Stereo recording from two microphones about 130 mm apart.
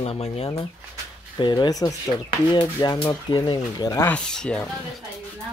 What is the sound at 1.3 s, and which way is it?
Speech, 35° left (ahead or behind).